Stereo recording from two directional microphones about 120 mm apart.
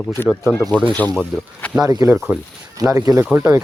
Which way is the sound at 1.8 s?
30° right (ahead or behind).